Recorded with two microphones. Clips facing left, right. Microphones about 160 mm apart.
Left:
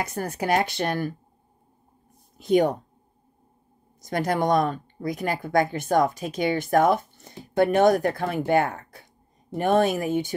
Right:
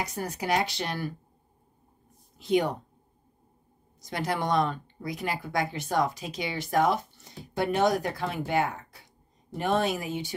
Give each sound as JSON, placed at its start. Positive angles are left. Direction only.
{"t": 0.0, "sound": "speech", "side_deg": 55}
{"t": 2.3, "sound": "speech", "side_deg": 50}
{"t": 4.0, "sound": "speech", "side_deg": 45}